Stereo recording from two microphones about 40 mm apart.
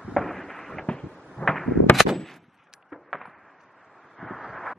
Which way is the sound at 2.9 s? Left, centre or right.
Centre.